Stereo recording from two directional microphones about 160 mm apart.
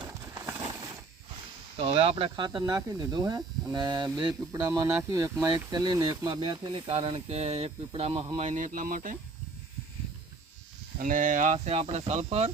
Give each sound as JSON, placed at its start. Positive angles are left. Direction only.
{"t": 0.3, "sound": "a sound", "side_deg": -20}
{"t": 1.7, "sound": "speech", "side_deg": -35}
{"t": 10.9, "sound": "speech", "side_deg": -60}